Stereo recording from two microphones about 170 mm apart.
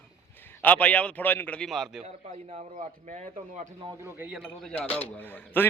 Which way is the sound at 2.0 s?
40° right (ahead or behind).